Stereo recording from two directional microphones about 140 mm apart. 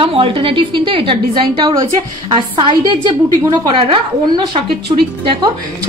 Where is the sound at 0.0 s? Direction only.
40° right (ahead or behind).